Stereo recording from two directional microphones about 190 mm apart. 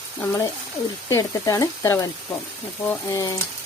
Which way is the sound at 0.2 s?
15° left (ahead or behind).